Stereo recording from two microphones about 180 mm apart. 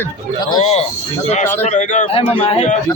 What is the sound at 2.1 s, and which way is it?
Speech, 30° left (ahead or behind).